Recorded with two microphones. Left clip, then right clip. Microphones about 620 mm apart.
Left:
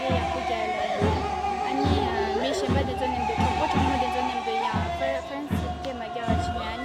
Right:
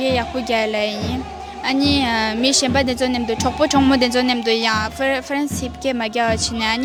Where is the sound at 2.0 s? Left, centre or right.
Right.